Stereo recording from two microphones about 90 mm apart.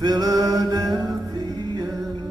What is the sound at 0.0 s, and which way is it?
Music, 45° right (ahead or behind).